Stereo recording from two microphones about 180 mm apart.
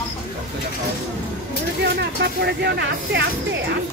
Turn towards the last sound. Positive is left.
turn(degrees=-70)  # may be behind; listen again after turning